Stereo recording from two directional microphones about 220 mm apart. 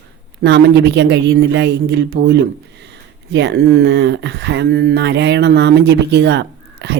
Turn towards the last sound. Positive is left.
turn(degrees=-50)  # may be behind; listen again after turning